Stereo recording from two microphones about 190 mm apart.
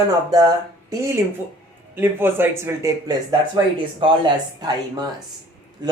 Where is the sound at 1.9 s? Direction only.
10° right (ahead or behind).